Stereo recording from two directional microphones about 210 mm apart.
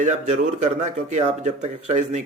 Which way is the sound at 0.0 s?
35° right (ahead or behind).